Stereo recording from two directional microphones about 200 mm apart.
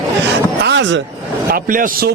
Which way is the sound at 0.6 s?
60° right (ahead or behind).